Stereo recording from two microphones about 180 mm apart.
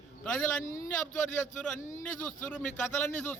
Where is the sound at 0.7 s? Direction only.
15° left (ahead or behind).